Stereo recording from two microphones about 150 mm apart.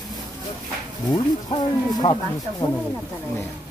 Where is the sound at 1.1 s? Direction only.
30° left (ahead or behind).